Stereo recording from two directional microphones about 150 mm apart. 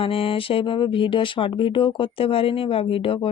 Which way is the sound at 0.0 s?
35° left (ahead or behind).